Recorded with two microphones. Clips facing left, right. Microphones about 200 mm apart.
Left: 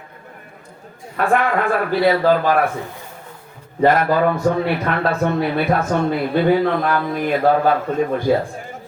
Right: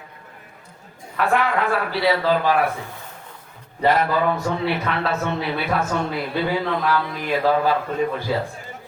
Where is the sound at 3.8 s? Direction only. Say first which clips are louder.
Left 4 dB; 50° left (ahead or behind).